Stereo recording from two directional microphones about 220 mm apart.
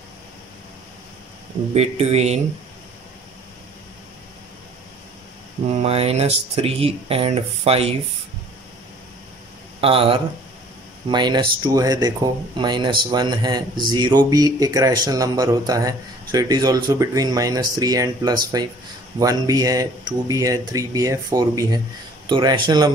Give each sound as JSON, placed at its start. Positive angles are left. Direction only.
{"t": 1.7, "sound": "speech", "side_deg": -30}
{"t": 5.7, "sound": "speech", "side_deg": -30}
{"t": 9.8, "sound": "speech", "side_deg": -25}